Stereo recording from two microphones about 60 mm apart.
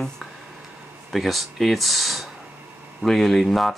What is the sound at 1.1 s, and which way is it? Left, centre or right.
Speech, centre.